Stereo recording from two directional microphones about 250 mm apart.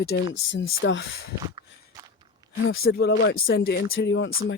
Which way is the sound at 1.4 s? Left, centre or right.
Centre.